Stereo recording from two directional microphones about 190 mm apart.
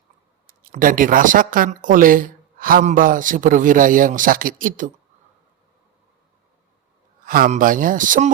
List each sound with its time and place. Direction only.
0.4 s speech: 45° right (ahead or behind)
7.3 s speech: 45° right (ahead or behind)